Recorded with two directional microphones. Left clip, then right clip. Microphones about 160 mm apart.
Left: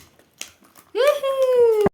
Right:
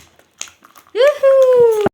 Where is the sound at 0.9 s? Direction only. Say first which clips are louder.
Right 7 dB; 50° left (ahead or behind).